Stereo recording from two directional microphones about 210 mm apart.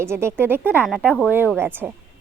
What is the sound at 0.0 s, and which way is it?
A woman's voice, 10° right (ahead or behind).